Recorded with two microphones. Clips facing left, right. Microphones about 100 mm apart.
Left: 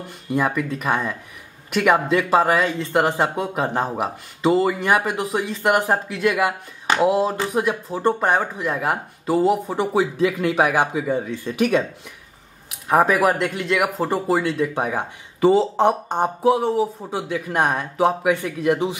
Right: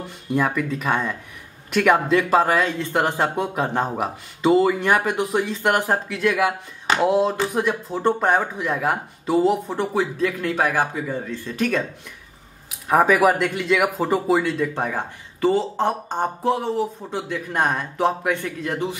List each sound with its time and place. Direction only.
0.3 s speech: 5° left (ahead or behind)
12.6 s speech: centre (ahead or behind)
14.7 s speech: 10° left (ahead or behind)